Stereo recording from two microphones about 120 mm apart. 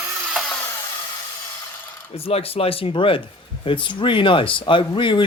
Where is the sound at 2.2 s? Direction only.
55° left (ahead or behind).